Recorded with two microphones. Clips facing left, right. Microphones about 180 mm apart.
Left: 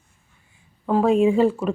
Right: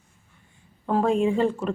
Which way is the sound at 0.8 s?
5° left (ahead or behind).